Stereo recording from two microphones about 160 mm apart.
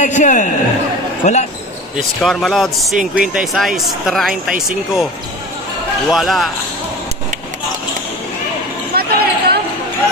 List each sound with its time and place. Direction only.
0.0 s a man's voice: 50° left (ahead or behind)
2.0 s speech: centre (ahead or behind)
6.0 s speech: centre (ahead or behind)
8.9 s basketball bounce: 80° right